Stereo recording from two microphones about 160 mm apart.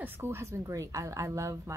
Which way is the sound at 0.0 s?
15° right (ahead or behind).